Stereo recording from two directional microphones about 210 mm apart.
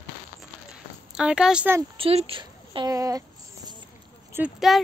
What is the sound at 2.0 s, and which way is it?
Speech, 25° right (ahead or behind).